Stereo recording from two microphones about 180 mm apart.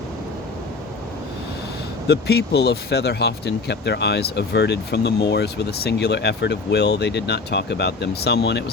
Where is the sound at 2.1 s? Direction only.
65° left (ahead or behind).